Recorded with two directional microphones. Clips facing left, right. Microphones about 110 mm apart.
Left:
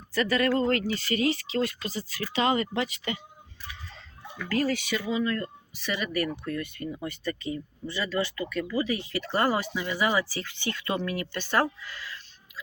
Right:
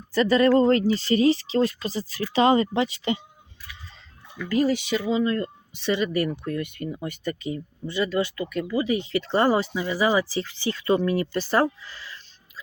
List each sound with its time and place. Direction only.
0.1 s speech: 30° right (ahead or behind)
4.4 s speech: 15° right (ahead or behind)